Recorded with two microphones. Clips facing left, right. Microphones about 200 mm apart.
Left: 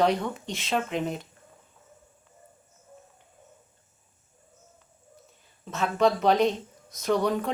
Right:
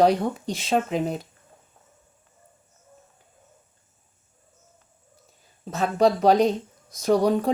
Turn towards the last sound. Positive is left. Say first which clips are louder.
# right 5 dB
turn(degrees=-35)  # may be behind; listen again after turning